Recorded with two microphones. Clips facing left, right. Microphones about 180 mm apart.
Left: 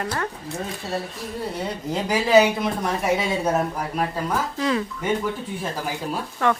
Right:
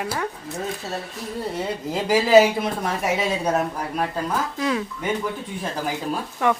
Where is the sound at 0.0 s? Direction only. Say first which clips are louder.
Even; 10° right (ahead or behind).